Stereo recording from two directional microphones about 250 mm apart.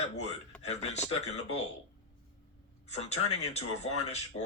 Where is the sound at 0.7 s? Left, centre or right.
Left.